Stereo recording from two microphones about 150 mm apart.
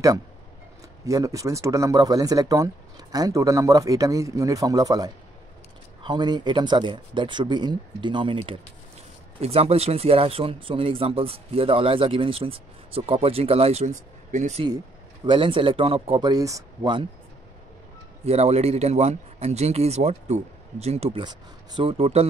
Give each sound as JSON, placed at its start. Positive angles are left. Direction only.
{"t": 1.0, "sound": "speech", "side_deg": -20}
{"t": 15.2, "sound": "speech", "side_deg": -35}
{"t": 16.3, "sound": "speech", "side_deg": -25}
{"t": 18.2, "sound": "a man's voice", "side_deg": -45}
{"t": 21.2, "sound": "speech", "side_deg": -30}